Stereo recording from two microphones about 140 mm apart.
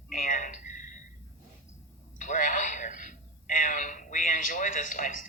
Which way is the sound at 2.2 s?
65° left (ahead or behind).